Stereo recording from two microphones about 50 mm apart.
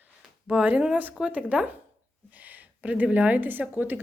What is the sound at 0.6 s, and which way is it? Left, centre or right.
Speech, right.